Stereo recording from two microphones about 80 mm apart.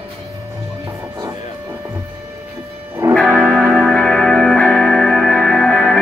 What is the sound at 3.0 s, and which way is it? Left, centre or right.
Music, right.